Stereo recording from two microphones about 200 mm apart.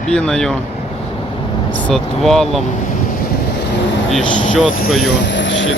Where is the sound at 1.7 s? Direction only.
5° left (ahead or behind).